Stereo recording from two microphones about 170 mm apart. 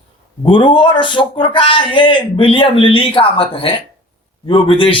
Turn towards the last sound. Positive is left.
turn(degrees=30)  # may be behind; listen again after turning